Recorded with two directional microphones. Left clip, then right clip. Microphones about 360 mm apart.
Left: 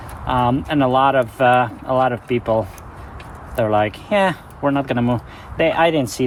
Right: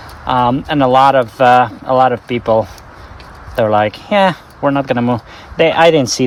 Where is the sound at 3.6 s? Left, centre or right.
Right.